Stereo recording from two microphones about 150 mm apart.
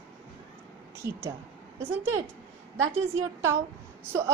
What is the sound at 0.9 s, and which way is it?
Speech, 15° right (ahead or behind).